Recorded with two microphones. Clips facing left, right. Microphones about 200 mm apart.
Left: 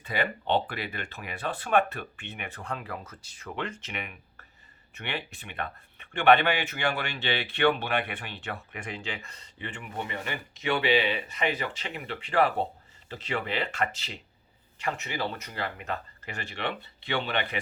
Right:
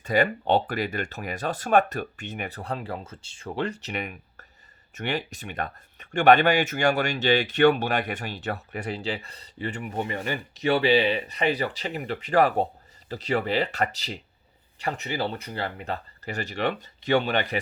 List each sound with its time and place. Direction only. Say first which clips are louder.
0.0 s speech: right 7 dB; 45° right (ahead or behind)